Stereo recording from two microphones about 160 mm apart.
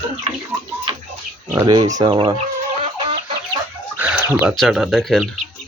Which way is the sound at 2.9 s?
30° right (ahead or behind).